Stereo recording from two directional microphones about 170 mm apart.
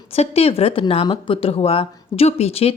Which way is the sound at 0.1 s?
35° left (ahead or behind).